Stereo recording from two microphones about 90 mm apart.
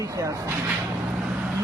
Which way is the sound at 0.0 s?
35° right (ahead or behind).